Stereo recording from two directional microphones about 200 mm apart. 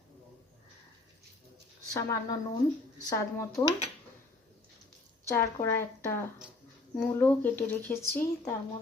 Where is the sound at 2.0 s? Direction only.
15° left (ahead or behind).